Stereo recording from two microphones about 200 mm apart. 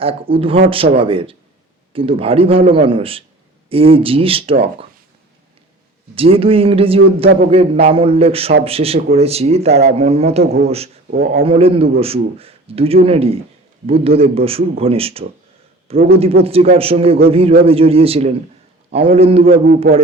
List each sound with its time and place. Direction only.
0.0 s a man's voice: 30° right (ahead or behind)
6.1 s a man's voice: 30° right (ahead or behind)
11.1 s a man's voice: 50° right (ahead or behind)
11.4 s a man's voice: 30° right (ahead or behind)
19.5 s a man's voice: 45° right (ahead or behind)